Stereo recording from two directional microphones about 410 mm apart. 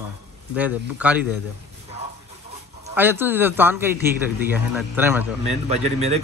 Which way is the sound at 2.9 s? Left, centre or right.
Centre.